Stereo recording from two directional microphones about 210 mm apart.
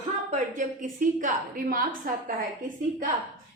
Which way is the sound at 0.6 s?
40° right (ahead or behind).